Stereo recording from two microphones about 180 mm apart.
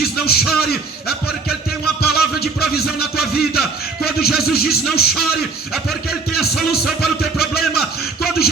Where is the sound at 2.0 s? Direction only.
60° left (ahead or behind).